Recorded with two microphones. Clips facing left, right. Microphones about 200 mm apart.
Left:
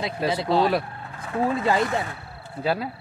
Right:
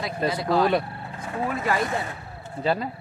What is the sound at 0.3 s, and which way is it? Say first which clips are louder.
Speech: even; 25° left (ahead or behind).